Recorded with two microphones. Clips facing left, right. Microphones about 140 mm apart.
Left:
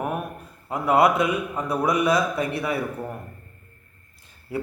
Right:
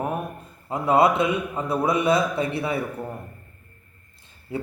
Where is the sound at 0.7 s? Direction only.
25° right (ahead or behind).